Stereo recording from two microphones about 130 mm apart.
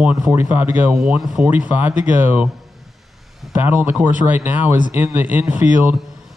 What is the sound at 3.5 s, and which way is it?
Speech, 15° right (ahead or behind).